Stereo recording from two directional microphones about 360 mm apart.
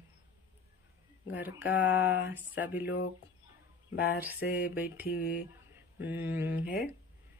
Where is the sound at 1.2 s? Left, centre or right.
Centre.